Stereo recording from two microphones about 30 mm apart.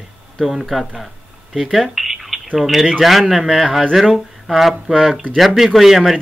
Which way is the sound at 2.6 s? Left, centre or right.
Centre.